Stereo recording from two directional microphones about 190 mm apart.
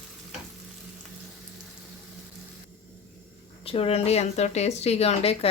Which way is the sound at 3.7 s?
30° left (ahead or behind).